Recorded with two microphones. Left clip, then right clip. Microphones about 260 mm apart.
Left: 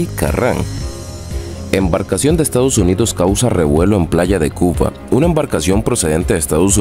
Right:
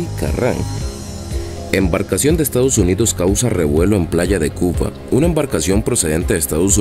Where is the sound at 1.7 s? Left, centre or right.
Left.